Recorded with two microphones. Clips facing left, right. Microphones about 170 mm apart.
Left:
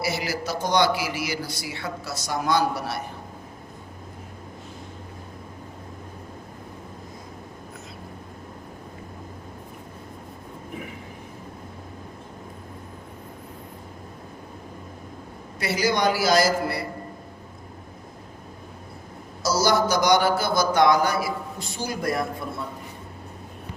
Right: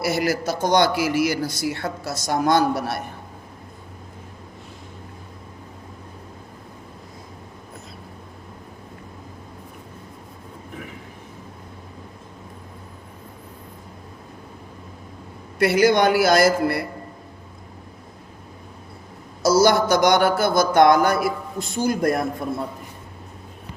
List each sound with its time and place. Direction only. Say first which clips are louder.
0.0 s speech: right 6 dB; 50° right (ahead or behind)
15.5 s a man's voice: right 8 dB; 55° right (ahead or behind)
19.4 s speech: right 5 dB; 55° right (ahead or behind)